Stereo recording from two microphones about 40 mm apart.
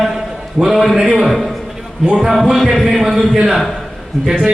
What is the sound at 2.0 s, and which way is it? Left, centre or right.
Speech, right.